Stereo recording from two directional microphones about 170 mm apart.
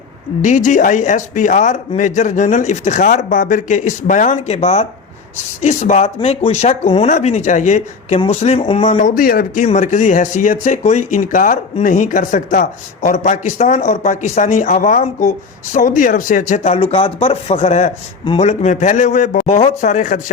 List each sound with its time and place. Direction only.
0.4 s speech: 45° left (ahead or behind)
9.6 s speech: 45° left (ahead or behind)
16.6 s speech: 35° left (ahead or behind)